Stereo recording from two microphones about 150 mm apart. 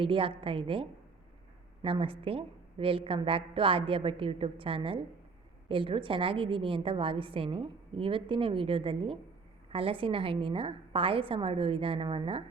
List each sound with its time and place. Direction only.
0.0 s a woman's voice: 35° right (ahead or behind)